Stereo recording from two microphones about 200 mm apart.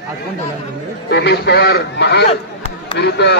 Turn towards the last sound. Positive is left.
turn(degrees=55)  # may be behind; listen again after turning